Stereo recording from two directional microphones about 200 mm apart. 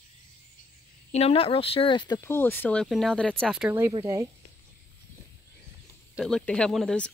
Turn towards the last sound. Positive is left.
turn(degrees=5)  # may be behind; listen again after turning